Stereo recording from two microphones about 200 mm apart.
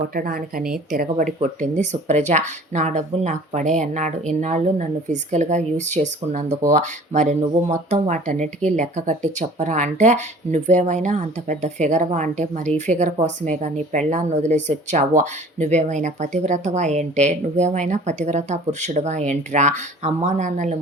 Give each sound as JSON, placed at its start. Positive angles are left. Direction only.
{"t": 0.1, "sound": "a woman's voice", "side_deg": -45}
{"t": 0.6, "sound": "a woman's voice", "side_deg": -5}
{"t": 0.9, "sound": "a woman's voice", "side_deg": -35}